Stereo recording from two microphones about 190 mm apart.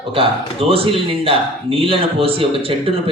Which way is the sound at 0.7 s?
30° right (ahead or behind).